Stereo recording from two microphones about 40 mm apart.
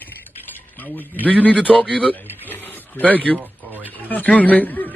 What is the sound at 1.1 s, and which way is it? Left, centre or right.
Speech, left.